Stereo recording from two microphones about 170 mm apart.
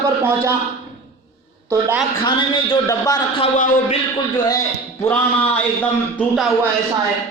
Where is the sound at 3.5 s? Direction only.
50° left (ahead or behind).